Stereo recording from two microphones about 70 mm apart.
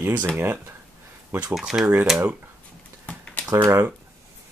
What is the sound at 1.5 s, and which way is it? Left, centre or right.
Speech, centre.